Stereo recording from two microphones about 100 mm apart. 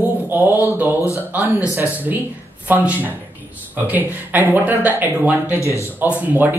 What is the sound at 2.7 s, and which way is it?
Speech, 15° right (ahead or behind).